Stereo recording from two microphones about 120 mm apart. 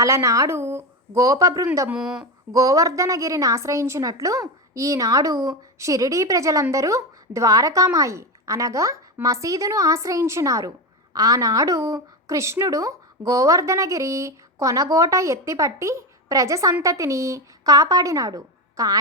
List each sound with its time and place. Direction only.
0.0 s speech: 25° right (ahead or behind)
1.9 s speech: 5° right (ahead or behind)
2.5 s speech: 30° right (ahead or behind)